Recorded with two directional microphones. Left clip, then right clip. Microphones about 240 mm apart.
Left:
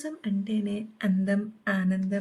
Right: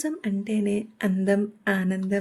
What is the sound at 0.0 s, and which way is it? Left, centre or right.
A woman's voice, centre.